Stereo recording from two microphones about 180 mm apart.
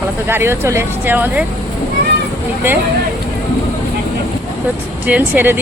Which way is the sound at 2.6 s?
15° right (ahead or behind).